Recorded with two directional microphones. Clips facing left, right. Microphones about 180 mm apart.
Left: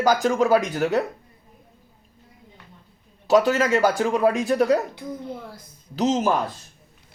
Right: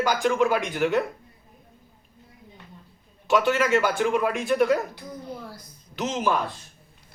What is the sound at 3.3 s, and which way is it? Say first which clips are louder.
A man's voice: left 3 dB; 35° left (ahead or behind).